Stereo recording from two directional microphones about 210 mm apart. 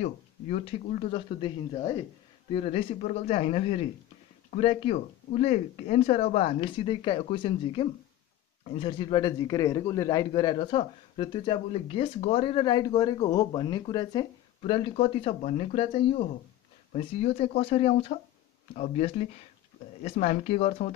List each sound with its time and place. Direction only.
0.0 s a man's voice: 30° left (ahead or behind)